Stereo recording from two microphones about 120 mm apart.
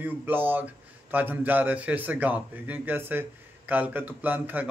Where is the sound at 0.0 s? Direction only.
15° right (ahead or behind).